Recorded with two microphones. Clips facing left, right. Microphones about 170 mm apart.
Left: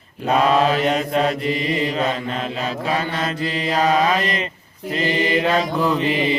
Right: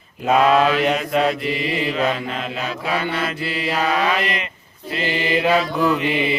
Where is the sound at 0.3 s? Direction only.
35° left (ahead or behind).